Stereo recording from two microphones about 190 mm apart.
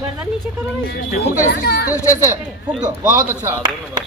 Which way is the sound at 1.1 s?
50° left (ahead or behind).